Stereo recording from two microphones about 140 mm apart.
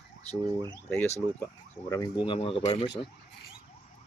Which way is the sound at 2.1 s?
35° left (ahead or behind).